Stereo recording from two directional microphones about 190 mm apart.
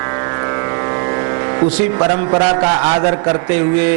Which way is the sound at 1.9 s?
25° right (ahead or behind).